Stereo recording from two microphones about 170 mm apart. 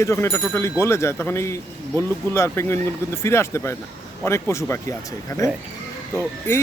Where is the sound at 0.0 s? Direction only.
15° left (ahead or behind).